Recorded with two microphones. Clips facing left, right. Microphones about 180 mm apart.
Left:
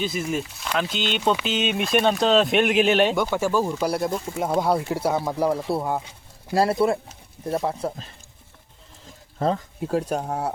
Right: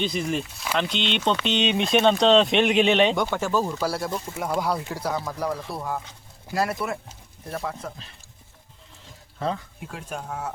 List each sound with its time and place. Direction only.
0.0 s speech: 5° left (ahead or behind); by 8.1 s 35° left (ahead or behind)
9.4 s speech: 40° left (ahead or behind)